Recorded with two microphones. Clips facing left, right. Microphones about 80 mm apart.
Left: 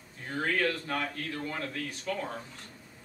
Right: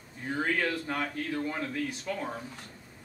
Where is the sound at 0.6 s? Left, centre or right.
Centre.